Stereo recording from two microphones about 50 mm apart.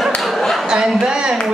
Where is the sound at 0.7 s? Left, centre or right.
Centre.